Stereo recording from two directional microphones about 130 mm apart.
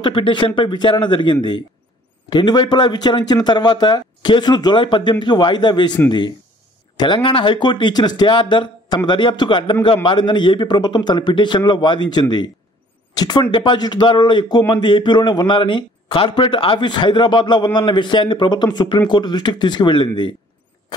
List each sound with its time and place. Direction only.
0.0 s a man's voice: 40° left (ahead or behind)